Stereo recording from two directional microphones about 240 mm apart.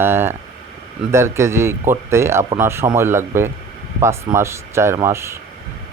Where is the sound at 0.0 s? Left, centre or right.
Centre.